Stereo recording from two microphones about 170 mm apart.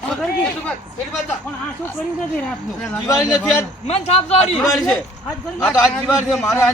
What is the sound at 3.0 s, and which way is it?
Speech, 20° left (ahead or behind).